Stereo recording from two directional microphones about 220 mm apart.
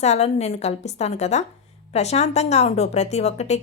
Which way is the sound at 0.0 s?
30° left (ahead or behind).